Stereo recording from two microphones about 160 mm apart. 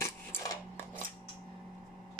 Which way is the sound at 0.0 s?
15° left (ahead or behind).